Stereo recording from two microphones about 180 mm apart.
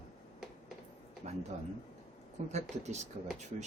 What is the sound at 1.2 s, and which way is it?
Speech, 40° right (ahead or behind).